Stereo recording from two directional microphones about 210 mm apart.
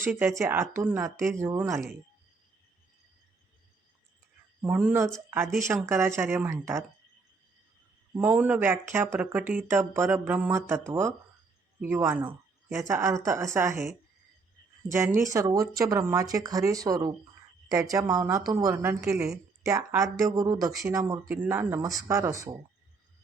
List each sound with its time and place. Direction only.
0.0 s speech: 10° right (ahead or behind)
4.6 s speech: 5° right (ahead or behind)
8.1 s speech: 5° right (ahead or behind)
14.8 s speech: 10° right (ahead or behind)
19.6 s speech: 15° right (ahead or behind)